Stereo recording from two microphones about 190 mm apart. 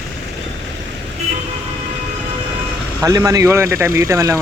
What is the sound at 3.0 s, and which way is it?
Speech, 20° right (ahead or behind).